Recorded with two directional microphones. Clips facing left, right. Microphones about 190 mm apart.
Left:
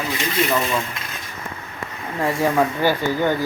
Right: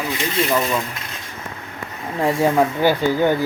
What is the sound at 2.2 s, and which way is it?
Speech, 15° right (ahead or behind).